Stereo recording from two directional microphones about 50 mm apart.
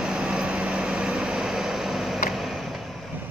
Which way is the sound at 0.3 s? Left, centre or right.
Centre.